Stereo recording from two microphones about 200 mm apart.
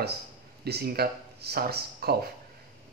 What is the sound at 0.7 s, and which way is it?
Speech, 50° right (ahead or behind).